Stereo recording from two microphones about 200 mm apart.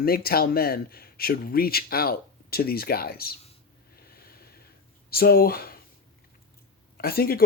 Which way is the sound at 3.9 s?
50° left (ahead or behind).